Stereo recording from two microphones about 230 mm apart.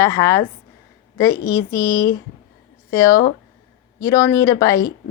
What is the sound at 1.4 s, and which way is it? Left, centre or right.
A woman's voice, centre.